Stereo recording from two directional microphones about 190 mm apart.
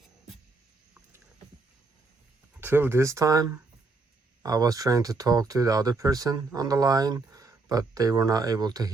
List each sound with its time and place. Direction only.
2.6 s speech: 10° right (ahead or behind)